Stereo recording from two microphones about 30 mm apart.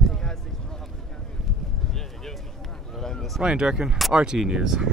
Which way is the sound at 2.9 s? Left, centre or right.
Centre.